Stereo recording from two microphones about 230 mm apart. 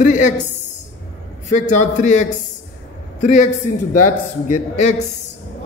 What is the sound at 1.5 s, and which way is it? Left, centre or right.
A man's voice, left.